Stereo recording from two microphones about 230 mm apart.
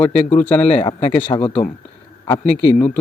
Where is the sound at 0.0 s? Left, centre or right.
Centre.